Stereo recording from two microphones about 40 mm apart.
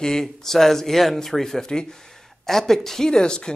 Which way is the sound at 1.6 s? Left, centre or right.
Centre.